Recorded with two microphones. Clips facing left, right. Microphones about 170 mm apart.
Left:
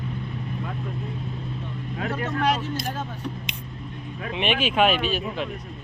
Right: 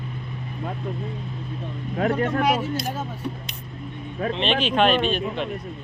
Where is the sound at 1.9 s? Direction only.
45° right (ahead or behind).